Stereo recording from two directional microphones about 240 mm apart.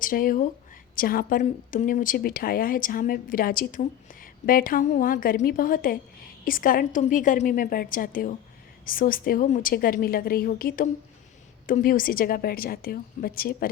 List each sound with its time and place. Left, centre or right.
0.0 s a woman's voice: left